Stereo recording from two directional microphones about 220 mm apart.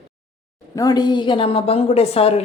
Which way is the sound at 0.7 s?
15° left (ahead or behind).